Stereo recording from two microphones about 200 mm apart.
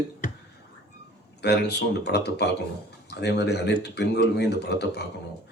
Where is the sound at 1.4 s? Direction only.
55° left (ahead or behind).